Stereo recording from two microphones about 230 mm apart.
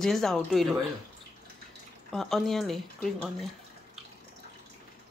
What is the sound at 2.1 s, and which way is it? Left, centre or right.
A woman's voice, centre.